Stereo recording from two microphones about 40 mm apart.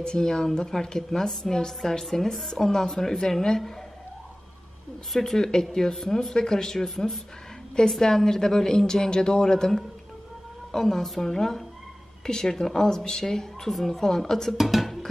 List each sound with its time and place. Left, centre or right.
0.0 s a woman's voice: centre
5.1 s a woman's voice: centre
14.6 s music: centre